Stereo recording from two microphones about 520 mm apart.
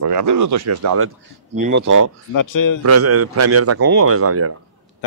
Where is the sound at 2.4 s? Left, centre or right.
Left.